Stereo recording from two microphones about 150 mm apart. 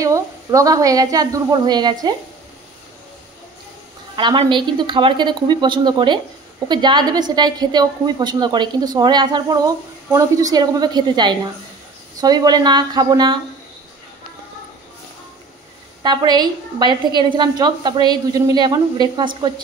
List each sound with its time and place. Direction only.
0.0 s a woman's voice: 20° right (ahead or behind)
4.1 s a woman's voice: 30° right (ahead or behind)
16.0 s a woman's voice: 30° right (ahead or behind)